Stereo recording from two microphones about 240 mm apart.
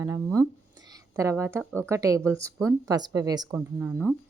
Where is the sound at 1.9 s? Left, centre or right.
Centre.